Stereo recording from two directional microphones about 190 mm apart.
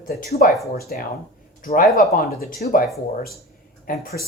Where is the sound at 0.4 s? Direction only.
50° left (ahead or behind).